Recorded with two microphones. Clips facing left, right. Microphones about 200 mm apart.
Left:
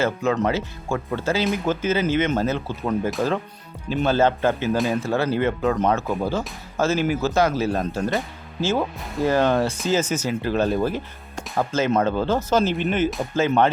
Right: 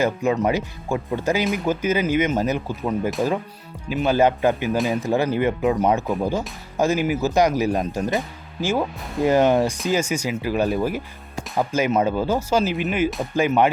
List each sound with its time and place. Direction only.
0.0 s speech: 15° right (ahead or behind)